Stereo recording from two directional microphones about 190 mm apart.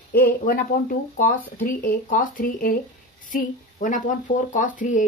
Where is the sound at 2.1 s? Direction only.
45° left (ahead or behind).